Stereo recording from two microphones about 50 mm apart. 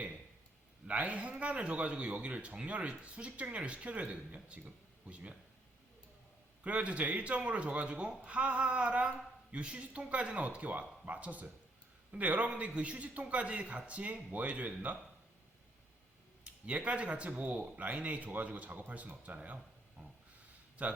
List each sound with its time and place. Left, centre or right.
0.9 s a man's voice: right
6.7 s a man's voice: right
16.6 s speech: right
20.8 s a man's voice: right